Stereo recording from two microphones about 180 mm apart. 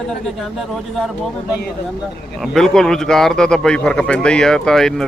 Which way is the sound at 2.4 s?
5° left (ahead or behind).